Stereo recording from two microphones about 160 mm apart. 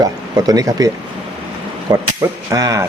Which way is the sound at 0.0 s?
20° right (ahead or behind).